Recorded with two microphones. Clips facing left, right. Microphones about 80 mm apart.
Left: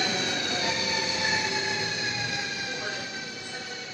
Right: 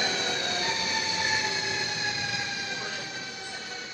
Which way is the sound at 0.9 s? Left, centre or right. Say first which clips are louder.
Left 1 dB; left.